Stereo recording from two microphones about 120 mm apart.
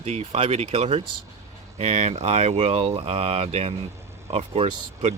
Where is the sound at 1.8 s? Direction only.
75° right (ahead or behind).